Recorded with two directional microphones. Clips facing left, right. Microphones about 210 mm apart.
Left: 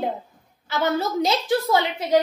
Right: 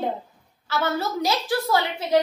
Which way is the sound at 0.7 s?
20° left (ahead or behind).